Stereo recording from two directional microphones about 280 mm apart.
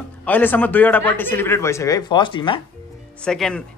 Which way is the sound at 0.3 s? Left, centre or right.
Centre.